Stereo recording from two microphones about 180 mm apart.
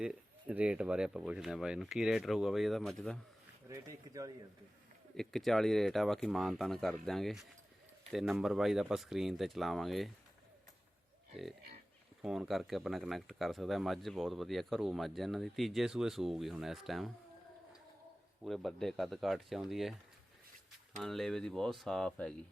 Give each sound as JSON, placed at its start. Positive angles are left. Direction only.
{"t": 0.0, "sound": "speech", "side_deg": -5}
{"t": 3.7, "sound": "speech", "side_deg": -20}
{"t": 5.1, "sound": "speech", "side_deg": 0}
{"t": 12.2, "sound": "speech", "side_deg": 0}
{"t": 18.4, "sound": "speech", "side_deg": 0}
{"t": 21.0, "sound": "speech", "side_deg": 0}